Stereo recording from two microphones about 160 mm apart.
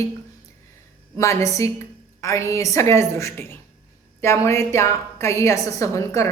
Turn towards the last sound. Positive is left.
turn(degrees=20)  # may be behind; listen again after turning